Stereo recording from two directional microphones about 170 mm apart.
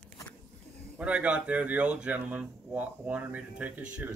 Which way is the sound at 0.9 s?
10° right (ahead or behind).